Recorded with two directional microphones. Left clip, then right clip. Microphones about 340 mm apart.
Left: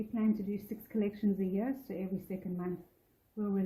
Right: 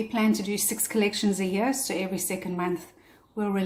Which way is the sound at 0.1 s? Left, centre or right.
Centre.